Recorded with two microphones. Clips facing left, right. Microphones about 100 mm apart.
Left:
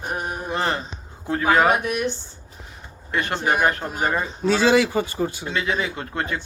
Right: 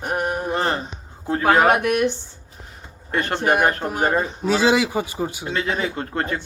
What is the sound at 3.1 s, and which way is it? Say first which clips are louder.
Speech: right 2 dB; 50° right (ahead or behind).